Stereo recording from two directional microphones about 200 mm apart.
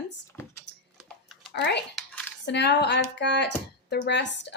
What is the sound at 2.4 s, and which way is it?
Speech, 60° left (ahead or behind).